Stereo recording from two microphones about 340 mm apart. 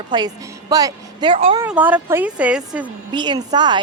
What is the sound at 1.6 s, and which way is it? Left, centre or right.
A woman's voice, centre.